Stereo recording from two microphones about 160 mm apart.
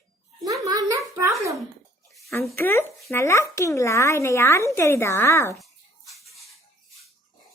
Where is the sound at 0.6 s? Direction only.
20° right (ahead or behind).